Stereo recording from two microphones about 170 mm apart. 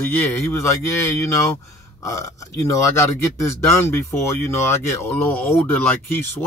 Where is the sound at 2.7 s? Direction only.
15° left (ahead or behind).